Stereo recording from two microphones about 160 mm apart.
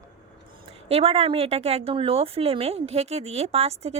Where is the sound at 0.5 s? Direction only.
40° right (ahead or behind).